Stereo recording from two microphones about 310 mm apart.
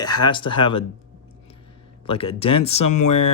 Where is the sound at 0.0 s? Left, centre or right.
Centre.